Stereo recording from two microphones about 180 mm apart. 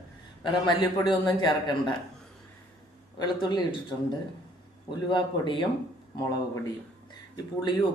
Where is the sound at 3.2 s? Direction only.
25° left (ahead or behind).